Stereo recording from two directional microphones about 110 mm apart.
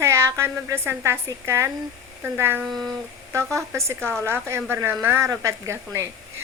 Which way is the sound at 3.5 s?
25° right (ahead or behind).